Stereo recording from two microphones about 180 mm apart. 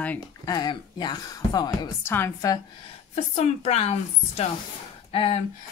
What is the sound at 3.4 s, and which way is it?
Speech, 35° left (ahead or behind).